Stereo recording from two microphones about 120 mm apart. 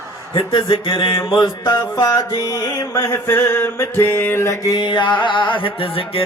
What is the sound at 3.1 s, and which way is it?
Mantra, 20° left (ahead or behind).